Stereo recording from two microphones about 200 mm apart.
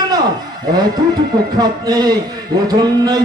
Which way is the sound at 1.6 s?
20° right (ahead or behind).